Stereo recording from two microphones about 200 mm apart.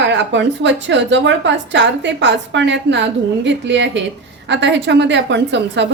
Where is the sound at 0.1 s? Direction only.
60° right (ahead or behind).